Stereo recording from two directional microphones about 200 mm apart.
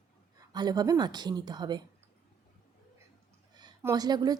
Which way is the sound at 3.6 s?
20° right (ahead or behind).